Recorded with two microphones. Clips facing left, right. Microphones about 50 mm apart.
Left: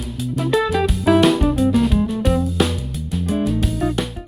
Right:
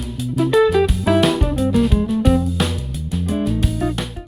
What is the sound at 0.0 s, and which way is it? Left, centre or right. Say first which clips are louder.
Music: right 3 dB; centre.